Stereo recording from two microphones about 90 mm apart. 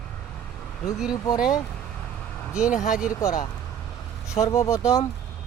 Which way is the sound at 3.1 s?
40° left (ahead or behind).